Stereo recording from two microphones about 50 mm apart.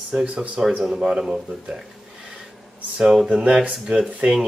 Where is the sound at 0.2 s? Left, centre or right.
Right.